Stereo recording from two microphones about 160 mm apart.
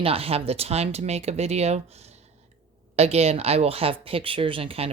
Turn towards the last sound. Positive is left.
turn(degrees=-35)  # may be behind; listen again after turning